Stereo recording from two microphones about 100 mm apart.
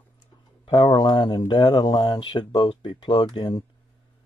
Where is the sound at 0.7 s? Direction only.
55° left (ahead or behind).